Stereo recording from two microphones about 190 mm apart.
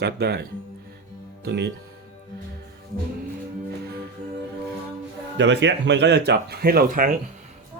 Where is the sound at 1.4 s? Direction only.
60° right (ahead or behind).